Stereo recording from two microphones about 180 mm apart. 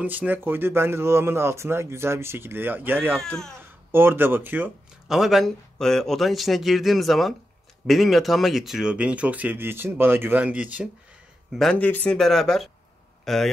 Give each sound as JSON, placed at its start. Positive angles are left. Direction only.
{"t": 0.0, "sound": "speech", "side_deg": -10}
{"t": 3.2, "sound": "speech", "side_deg": 5}
{"t": 3.9, "sound": "speech", "side_deg": -10}
{"t": 11.5, "sound": "a man's voice", "side_deg": 5}